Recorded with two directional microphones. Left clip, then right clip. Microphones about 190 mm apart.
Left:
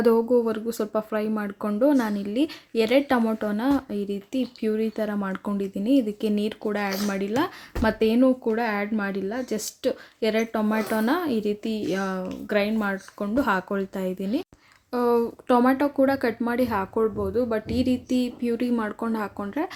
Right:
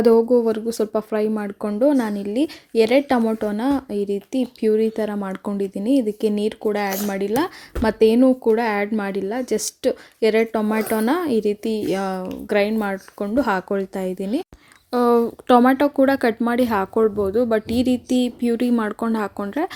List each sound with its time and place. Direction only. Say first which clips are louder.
0.0 s speech: right 5 dB; 25° right (ahead or behind)